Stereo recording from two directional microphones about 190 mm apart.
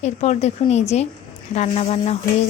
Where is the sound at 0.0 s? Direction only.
35° left (ahead or behind).